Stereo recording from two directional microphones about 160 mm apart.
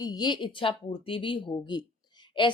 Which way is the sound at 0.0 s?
25° left (ahead or behind).